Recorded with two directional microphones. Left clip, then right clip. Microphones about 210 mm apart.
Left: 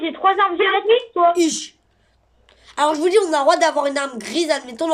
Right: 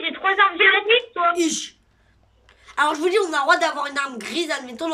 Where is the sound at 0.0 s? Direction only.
25° left (ahead or behind).